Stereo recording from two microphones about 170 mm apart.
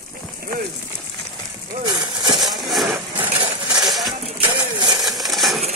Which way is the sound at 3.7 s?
25° right (ahead or behind).